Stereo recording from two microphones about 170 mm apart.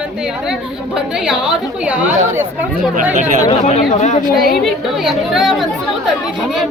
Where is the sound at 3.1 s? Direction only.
45° right (ahead or behind).